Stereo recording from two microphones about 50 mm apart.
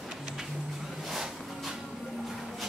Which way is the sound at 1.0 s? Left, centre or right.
Centre.